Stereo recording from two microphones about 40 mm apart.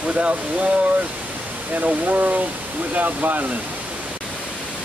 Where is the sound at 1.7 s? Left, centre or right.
Right.